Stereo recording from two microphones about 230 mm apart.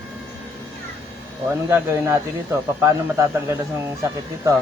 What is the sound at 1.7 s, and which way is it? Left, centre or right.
Speech, centre.